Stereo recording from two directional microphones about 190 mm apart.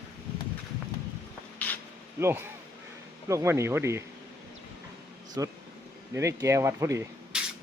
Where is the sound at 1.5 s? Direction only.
10° left (ahead or behind).